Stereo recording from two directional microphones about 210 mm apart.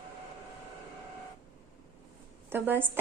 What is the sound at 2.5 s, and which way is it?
Speech, 10° right (ahead or behind).